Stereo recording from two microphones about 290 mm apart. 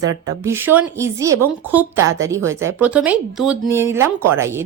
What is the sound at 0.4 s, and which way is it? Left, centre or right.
Speech, centre.